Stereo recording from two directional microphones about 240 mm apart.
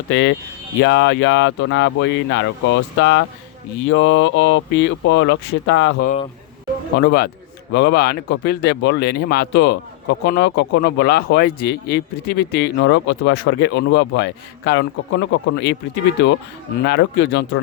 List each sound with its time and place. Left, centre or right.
0.1 s speech: left
16.8 s speech: left